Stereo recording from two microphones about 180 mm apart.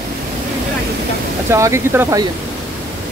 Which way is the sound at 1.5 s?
15° right (ahead or behind).